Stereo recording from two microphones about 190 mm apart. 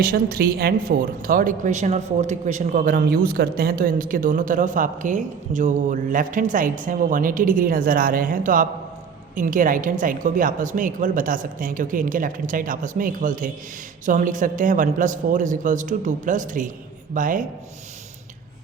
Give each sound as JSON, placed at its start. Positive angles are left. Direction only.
{"t": 0.0, "sound": "speech", "side_deg": -50}